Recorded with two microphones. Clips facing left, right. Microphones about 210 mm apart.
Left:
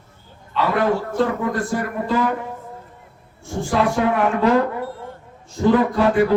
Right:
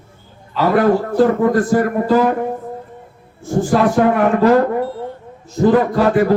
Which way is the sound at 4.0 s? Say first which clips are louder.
Right 5 dB; 45° right (ahead or behind).